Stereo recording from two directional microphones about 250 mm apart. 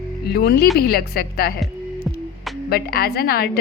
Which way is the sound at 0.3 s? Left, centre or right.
Left.